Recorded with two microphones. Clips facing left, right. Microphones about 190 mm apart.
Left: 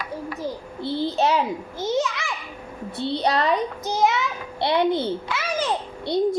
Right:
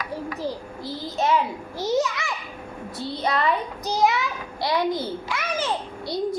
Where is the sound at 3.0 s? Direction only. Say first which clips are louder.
Left 3 dB; 30° left (ahead or behind).